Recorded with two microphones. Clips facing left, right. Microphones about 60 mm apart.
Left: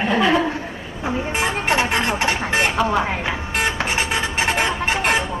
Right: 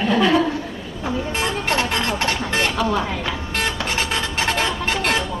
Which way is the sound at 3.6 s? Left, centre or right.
Left.